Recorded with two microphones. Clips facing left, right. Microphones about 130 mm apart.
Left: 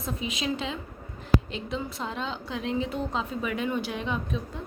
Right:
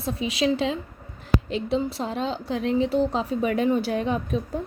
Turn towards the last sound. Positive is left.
turn(degrees=-40)  # may be behind; listen again after turning